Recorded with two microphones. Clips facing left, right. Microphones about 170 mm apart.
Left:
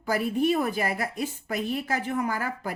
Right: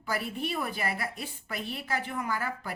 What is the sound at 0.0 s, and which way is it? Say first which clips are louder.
A woman's voice: left 8 dB; 45° left (ahead or behind).